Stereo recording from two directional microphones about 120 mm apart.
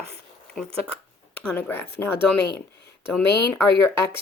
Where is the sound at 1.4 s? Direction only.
15° left (ahead or behind).